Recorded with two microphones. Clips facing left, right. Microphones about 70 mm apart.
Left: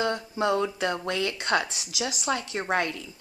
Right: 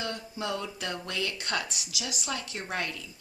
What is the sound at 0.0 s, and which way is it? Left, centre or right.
Speech, left.